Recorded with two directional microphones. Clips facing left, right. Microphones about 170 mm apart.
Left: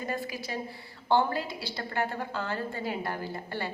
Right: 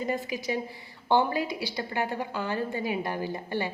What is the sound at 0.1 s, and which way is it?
A woman's voice, 15° right (ahead or behind).